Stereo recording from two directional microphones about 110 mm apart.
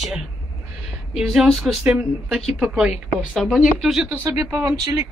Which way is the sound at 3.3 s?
5° left (ahead or behind).